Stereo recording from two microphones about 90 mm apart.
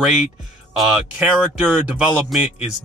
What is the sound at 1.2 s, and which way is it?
Speech, 15° right (ahead or behind).